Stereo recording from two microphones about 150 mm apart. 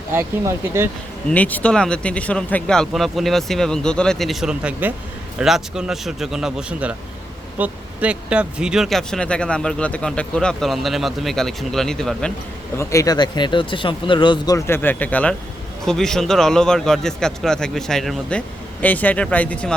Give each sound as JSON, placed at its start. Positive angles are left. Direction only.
{"t": 0.1, "sound": "speech", "side_deg": -15}
{"t": 1.3, "sound": "speech", "side_deg": 10}
{"t": 12.7, "sound": "speech", "side_deg": 20}